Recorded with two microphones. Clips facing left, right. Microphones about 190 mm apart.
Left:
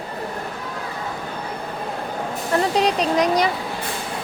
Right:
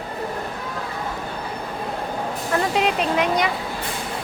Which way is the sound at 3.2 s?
35° left (ahead or behind).